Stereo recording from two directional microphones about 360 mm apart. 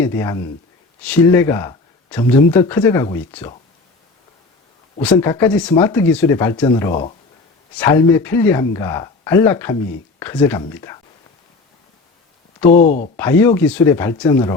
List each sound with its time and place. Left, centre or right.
0.0 s speech: centre
5.1 s speech: centre
12.6 s speech: left
13.1 s speech: centre